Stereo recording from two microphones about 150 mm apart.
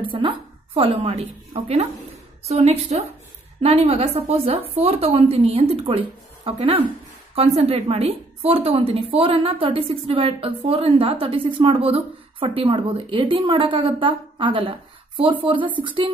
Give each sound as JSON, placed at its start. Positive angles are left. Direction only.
{"t": 0.0, "sound": "a woman's voice", "side_deg": -35}